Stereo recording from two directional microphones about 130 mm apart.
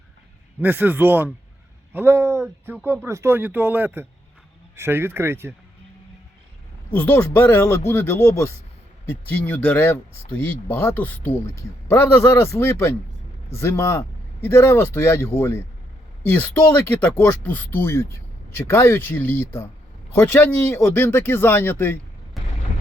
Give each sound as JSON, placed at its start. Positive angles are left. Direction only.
{"t": 0.6, "sound": "speech", "side_deg": -15}
{"t": 6.9, "sound": "speech", "side_deg": 15}